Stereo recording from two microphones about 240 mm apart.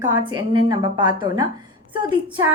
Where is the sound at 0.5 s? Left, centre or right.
Centre.